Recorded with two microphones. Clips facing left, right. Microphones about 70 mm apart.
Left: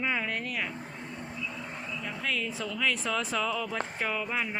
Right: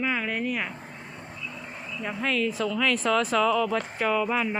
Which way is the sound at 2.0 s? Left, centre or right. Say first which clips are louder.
Right 7 dB; right.